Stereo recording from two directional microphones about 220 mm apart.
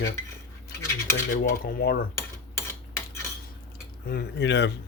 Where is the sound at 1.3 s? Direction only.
40° left (ahead or behind).